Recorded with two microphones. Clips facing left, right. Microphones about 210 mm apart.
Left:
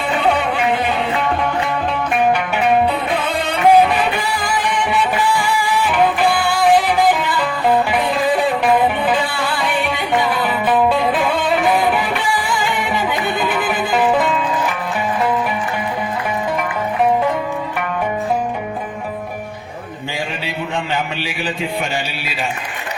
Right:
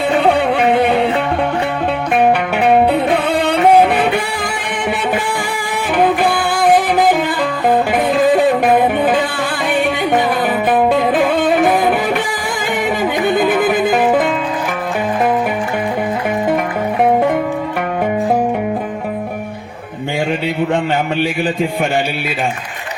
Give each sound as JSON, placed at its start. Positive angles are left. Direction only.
{"t": 0.1, "sound": "music", "side_deg": -60}
{"t": 2.6, "sound": "music", "side_deg": -60}